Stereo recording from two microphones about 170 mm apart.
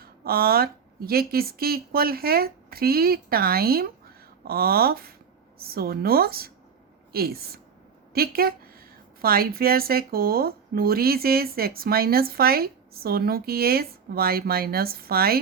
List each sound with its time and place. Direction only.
0.0 s speech: 60° right (ahead or behind)